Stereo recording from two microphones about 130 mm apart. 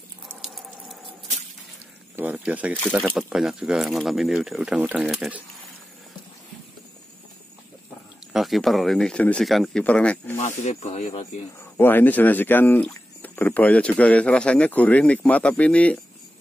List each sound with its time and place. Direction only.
0.4 s water: centre (ahead or behind)
2.1 s speech: 10° right (ahead or behind)
8.3 s speech: centre (ahead or behind)
10.3 s speech: 60° left (ahead or behind)
11.7 s speech: 15° left (ahead or behind)